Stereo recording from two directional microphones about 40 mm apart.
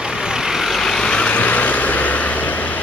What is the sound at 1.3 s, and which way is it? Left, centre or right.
Vehicle, left.